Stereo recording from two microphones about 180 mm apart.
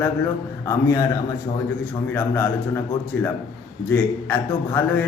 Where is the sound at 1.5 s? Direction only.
30° left (ahead or behind).